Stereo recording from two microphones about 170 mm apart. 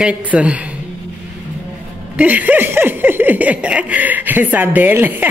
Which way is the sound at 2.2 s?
10° right (ahead or behind).